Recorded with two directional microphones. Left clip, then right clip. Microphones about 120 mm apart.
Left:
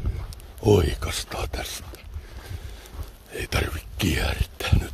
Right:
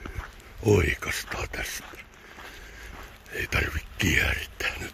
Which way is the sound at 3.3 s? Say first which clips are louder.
Even; 25° left (ahead or behind).